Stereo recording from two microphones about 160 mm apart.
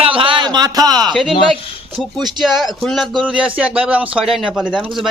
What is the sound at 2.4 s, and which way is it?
Speech, centre (ahead or behind).